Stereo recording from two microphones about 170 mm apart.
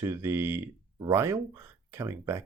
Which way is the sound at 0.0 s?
15° right (ahead or behind).